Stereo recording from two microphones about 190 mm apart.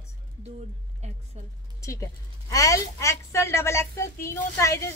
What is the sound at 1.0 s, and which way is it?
Speech, 35° right (ahead or behind).